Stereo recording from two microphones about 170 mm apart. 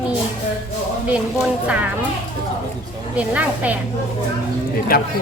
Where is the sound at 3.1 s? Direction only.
10° right (ahead or behind).